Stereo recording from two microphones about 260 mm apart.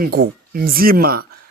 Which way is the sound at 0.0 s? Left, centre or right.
Right.